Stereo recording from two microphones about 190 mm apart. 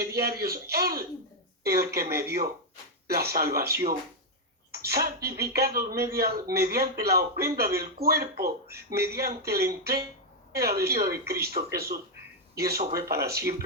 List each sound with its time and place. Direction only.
0.0 s speech: 55° right (ahead or behind)